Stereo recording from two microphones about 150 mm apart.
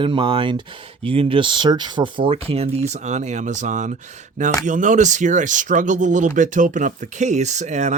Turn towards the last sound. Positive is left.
turn(degrees=-50)  # may be behind; listen again after turning